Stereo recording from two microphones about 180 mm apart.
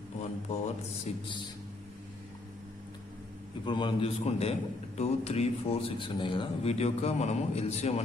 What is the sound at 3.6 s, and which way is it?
A man's voice, 25° left (ahead or behind).